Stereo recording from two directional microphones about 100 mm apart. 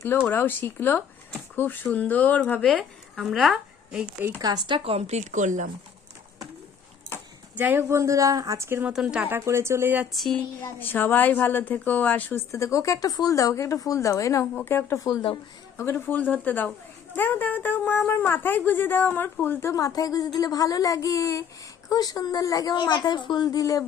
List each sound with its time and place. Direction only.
0.3 s speech: 20° left (ahead or behind); by 4.0 s centre (ahead or behind)
4.4 s speech: 40° right (ahead or behind)
4.8 s a woman's voice: 85° right
7.5 s speech: 20° right (ahead or behind)
8.9 s speech: 10° right (ahead or behind)
9.3 s speech: 25° right (ahead or behind)
10.1 s a sound: centre (ahead or behind)
10.6 s speech: 20° left (ahead or behind)
15.0 s a woman's voice: 55° left (ahead or behind)
15.8 s a woman's voice: 20° left (ahead or behind); by 22.8 s 40° left (ahead or behind)
22.8 s a woman's voice: 50° left (ahead or behind)